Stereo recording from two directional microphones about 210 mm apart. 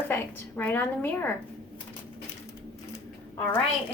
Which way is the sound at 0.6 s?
10° left (ahead or behind).